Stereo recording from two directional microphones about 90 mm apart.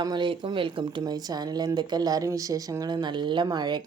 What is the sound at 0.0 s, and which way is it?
Speech, 55° right (ahead or behind).